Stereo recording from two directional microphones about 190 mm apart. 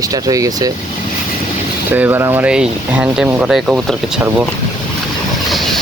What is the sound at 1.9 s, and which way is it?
Speech, 10° right (ahead or behind).